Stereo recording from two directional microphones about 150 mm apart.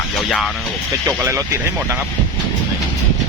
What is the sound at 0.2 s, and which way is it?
Speech, centre (ahead or behind).